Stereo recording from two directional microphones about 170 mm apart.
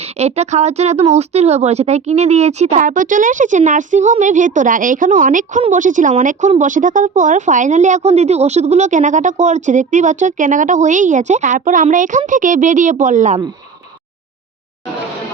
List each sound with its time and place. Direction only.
0.0 s speech: 40° right (ahead or behind)
2.8 s a woman's voice: 50° right (ahead or behind)